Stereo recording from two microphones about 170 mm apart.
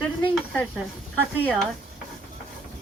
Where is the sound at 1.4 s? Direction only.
Centre (ahead or behind).